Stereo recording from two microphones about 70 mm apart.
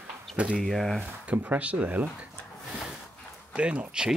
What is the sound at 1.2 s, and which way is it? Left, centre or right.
Speech, right.